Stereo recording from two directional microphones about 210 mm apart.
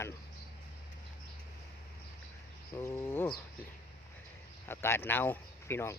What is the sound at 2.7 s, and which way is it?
Speech, 10° left (ahead or behind).